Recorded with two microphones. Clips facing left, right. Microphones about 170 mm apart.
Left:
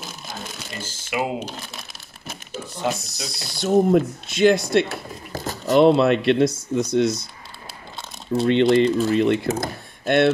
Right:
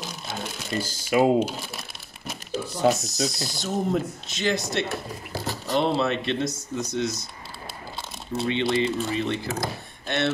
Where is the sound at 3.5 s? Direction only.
65° left (ahead or behind).